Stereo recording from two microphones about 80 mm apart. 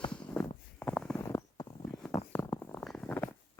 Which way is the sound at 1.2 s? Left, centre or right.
Left.